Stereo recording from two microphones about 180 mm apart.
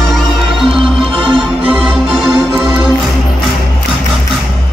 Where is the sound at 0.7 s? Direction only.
30° right (ahead or behind).